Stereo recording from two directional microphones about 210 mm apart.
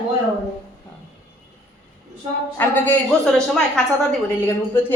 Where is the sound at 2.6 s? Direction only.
5° left (ahead or behind).